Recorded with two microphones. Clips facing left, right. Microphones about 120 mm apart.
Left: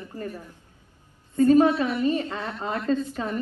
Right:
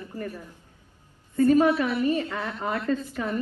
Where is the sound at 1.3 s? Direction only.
20° left (ahead or behind).